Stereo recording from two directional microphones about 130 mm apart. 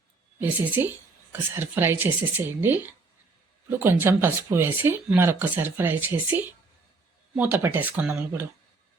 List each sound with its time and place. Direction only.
0.3 s speech: 15° right (ahead or behind)